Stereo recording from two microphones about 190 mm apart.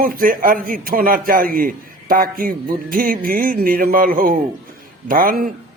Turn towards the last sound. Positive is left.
turn(degrees=-50)  # may be behind; listen again after turning